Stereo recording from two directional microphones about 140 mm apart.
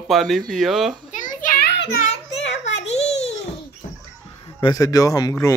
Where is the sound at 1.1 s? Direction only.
70° left (ahead or behind).